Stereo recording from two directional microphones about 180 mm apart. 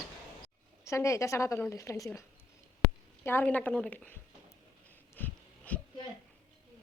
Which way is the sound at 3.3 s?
10° left (ahead or behind).